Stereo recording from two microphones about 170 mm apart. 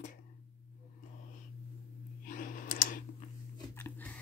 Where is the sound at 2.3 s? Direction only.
55° left (ahead or behind).